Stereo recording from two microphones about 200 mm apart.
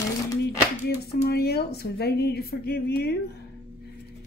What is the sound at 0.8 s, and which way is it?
Speech, 55° left (ahead or behind).